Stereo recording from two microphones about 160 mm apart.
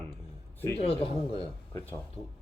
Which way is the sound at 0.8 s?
40° left (ahead or behind).